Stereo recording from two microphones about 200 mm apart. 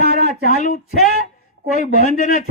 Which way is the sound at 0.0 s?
40° left (ahead or behind).